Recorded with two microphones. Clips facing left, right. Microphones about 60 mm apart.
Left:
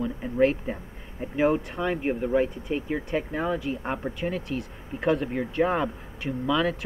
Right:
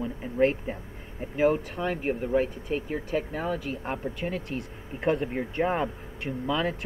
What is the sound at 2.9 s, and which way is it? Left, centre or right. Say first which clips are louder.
Speech: left 1 dB; left.